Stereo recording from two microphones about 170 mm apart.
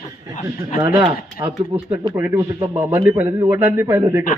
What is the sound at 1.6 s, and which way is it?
Speech, 35° right (ahead or behind).